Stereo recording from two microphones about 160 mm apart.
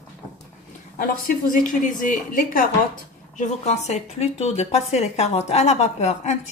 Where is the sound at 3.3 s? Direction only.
50° left (ahead or behind).